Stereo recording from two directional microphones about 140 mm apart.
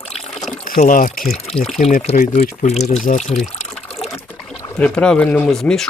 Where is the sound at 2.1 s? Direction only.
70° left (ahead or behind).